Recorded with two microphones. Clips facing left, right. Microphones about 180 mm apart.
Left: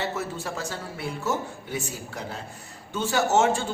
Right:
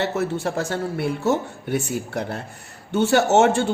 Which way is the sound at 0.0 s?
65° right (ahead or behind).